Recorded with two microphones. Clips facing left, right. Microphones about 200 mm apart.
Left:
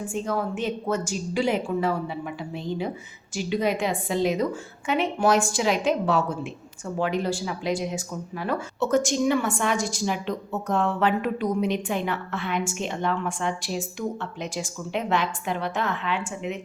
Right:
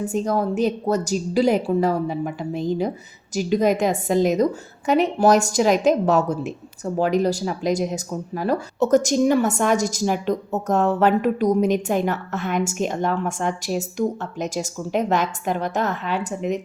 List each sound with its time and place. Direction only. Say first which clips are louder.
0.0 s a woman's voice: right 5 dB; 40° right (ahead or behind)